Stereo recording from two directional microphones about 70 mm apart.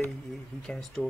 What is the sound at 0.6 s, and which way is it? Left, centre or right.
Speech, centre.